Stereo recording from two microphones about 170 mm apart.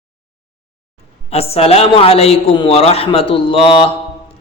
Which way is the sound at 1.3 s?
35° left (ahead or behind).